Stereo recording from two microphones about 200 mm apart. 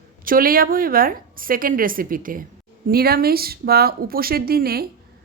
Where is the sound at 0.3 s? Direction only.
45° right (ahead or behind).